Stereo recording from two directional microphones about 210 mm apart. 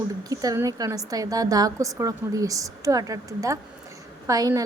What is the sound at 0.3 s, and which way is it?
A woman's voice, 15° right (ahead or behind).